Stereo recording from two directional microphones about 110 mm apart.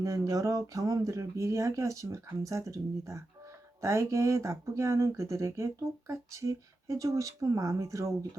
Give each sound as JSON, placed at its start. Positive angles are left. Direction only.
{"t": 0.0, "sound": "speech", "side_deg": -30}